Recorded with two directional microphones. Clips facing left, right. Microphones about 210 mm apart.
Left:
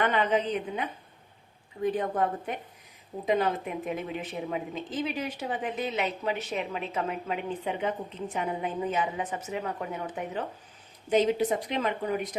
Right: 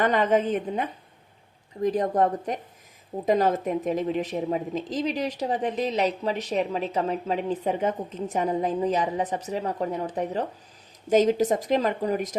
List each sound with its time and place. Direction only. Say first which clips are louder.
0.0 s a woman's voice: right 4 dB; 45° right (ahead or behind)